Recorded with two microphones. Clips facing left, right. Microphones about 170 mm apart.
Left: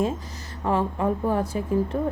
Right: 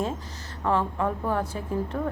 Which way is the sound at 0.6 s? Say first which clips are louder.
Left 2 dB; 10° left (ahead or behind).